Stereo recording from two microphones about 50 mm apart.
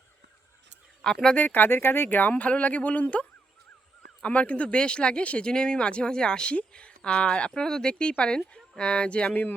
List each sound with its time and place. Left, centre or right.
1.0 s speech: centre
1.4 s speech: left
9.3 s speech: left